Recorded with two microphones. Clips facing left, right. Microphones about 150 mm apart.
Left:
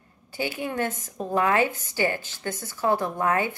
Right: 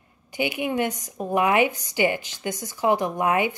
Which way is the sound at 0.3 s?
15° right (ahead or behind).